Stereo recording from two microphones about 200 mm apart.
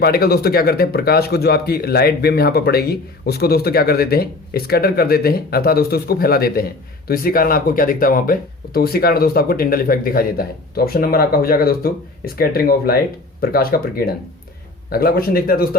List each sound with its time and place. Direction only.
0.0 s a man's voice: 50° left (ahead or behind)